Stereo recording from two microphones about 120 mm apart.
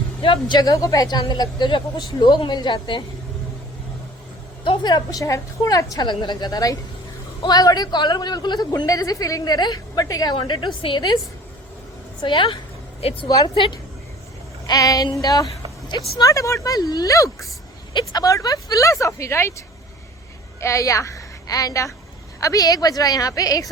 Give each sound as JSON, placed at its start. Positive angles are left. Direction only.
{"t": 0.2, "sound": "a woman's voice", "side_deg": 45}
{"t": 4.6, "sound": "a woman's voice", "side_deg": 40}
{"t": 12.2, "sound": "a woman's voice", "side_deg": 45}
{"t": 14.7, "sound": "a woman's voice", "side_deg": 30}